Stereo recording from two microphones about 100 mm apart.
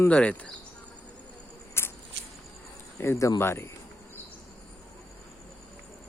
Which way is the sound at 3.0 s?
30° left (ahead or behind).